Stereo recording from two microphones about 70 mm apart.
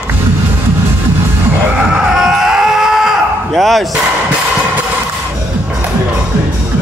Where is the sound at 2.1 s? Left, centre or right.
Centre.